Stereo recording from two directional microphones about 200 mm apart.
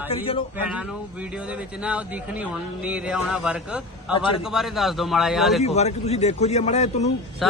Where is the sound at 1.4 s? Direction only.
5° right (ahead or behind).